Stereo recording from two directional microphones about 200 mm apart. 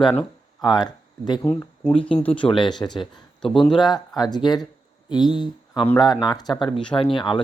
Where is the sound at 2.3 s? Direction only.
25° left (ahead or behind).